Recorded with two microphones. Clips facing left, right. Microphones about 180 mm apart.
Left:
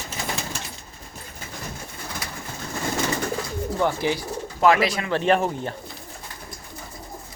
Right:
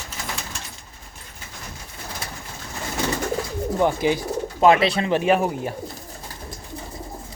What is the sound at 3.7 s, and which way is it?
Speech, 15° right (ahead or behind).